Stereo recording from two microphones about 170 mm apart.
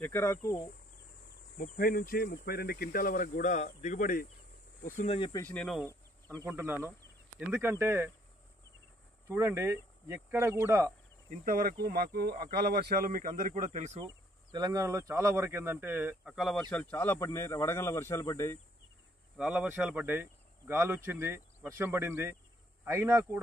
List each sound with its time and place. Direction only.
0.0 s speech: 15° left (ahead or behind)
1.6 s speech: 55° left (ahead or behind)
4.8 s cricket: 40° left (ahead or behind)
5.3 s speech: 10° left (ahead or behind)
6.3 s speech: 15° right (ahead or behind)
9.3 s speech: 15° right (ahead or behind)
11.2 s speech: 55° right (ahead or behind)
14.0 s speech: 25° right (ahead or behind); by 16.6 s centre (ahead or behind)
16.7 s speech: 10° left (ahead or behind)
19.3 s speech: 5° right (ahead or behind)